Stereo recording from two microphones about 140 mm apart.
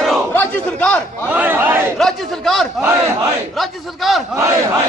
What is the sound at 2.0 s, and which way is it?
Speech, 5° left (ahead or behind).